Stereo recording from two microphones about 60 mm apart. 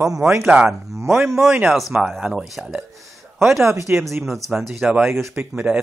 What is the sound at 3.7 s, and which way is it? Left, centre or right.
Speech, right.